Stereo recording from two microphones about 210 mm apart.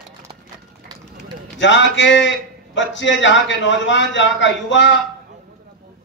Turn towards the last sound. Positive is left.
turn(degrees=60)  # may be behind; listen again after turning